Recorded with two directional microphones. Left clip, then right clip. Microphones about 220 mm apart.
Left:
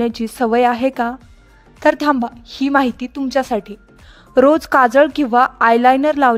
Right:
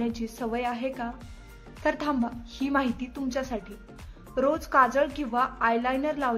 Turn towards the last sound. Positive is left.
turn(degrees=45)  # may be behind; listen again after turning